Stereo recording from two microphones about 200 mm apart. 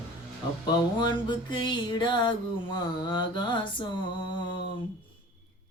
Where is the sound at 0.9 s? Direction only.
25° left (ahead or behind).